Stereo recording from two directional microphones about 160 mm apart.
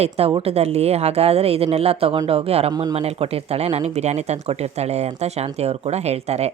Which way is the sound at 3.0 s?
40° right (ahead or behind).